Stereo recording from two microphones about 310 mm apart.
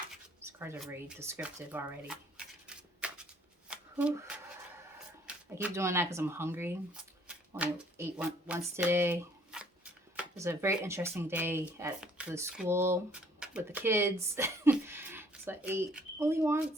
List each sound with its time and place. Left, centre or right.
0.4 s speech: centre
3.0 s shuffling cards: centre
5.2 s speech: centre